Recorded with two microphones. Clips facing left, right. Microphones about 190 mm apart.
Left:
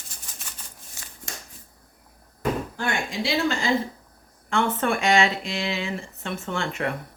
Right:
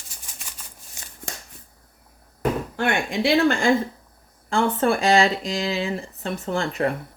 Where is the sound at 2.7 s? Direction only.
60° right (ahead or behind).